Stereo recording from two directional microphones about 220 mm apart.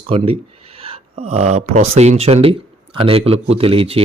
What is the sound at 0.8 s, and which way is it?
Speech, 25° right (ahead or behind).